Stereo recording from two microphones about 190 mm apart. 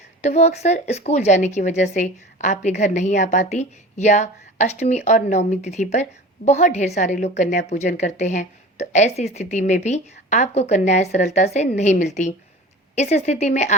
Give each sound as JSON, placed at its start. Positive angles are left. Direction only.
{"t": 0.2, "sound": "speech", "side_deg": 35}